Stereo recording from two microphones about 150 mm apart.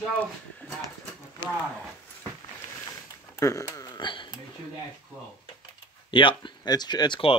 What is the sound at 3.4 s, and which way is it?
Speech, 20° left (ahead or behind).